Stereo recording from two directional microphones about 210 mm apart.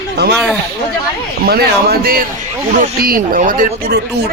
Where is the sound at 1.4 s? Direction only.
50° right (ahead or behind).